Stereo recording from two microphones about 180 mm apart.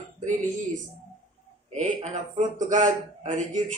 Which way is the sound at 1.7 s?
40° right (ahead or behind).